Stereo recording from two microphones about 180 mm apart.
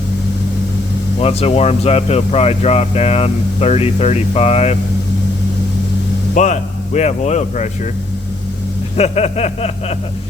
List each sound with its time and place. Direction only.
1.2 s speech: 35° left (ahead or behind)
6.3 s speech: 45° left (ahead or behind)
9.0 s speech: 35° left (ahead or behind)